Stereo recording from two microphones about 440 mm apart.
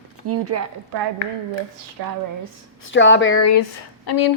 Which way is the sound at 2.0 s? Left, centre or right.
Right.